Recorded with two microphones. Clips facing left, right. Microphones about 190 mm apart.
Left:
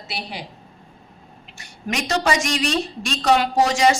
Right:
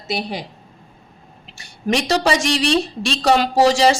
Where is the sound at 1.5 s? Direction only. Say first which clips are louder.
Right 7 dB; 30° right (ahead or behind).